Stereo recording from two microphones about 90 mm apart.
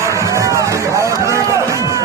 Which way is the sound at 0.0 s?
35° right (ahead or behind).